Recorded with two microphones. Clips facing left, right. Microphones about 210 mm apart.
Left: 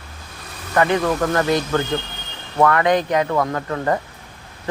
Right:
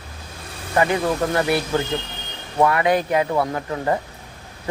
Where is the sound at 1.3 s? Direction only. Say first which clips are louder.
Left 2 dB; 15° right (ahead or behind).